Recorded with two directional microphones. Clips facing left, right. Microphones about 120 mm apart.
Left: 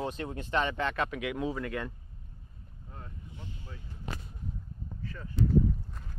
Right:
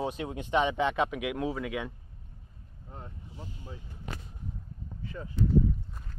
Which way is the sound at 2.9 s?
25° right (ahead or behind).